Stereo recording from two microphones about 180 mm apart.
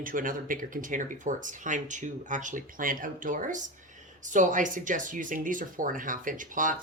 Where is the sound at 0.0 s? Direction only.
50° right (ahead or behind).